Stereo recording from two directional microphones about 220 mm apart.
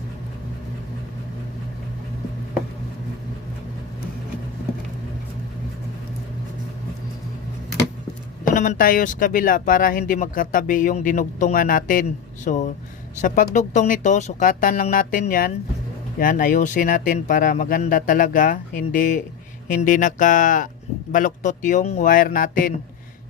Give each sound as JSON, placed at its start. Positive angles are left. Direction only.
{"t": 8.4, "sound": "speech", "side_deg": 35}